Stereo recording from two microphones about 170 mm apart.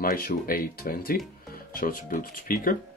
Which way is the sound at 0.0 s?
60° left (ahead or behind).